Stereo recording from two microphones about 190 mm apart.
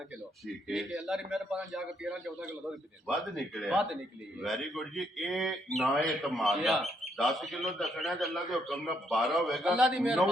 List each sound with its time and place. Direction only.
0.4 s a man's voice: centre (ahead or behind)